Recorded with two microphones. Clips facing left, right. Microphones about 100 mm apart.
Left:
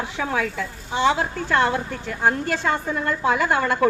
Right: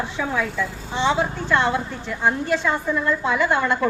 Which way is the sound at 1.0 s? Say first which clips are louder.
Even; 50° left (ahead or behind).